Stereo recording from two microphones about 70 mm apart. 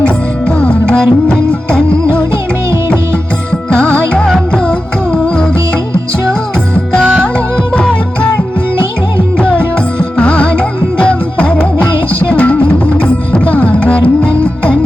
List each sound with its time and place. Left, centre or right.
0.0 s music: centre
3.7 s music: centre
7.0 s music: right
7.3 s music: centre
9.7 s music: centre